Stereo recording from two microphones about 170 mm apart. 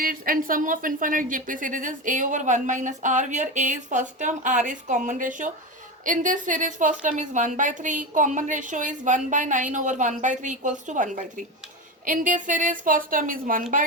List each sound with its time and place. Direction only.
0.0 s a woman's voice: 55° right (ahead or behind)